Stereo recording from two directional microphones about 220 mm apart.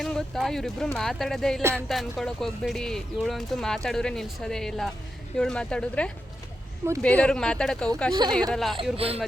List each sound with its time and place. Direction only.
0.0 s speech: centre (ahead or behind)
8.1 s a woman's voice: 20° right (ahead or behind)
8.5 s speech: centre (ahead or behind)
9.0 s a woman's voice: 25° right (ahead or behind)